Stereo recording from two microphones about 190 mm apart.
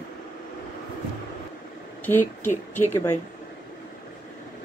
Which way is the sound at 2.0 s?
10° left (ahead or behind).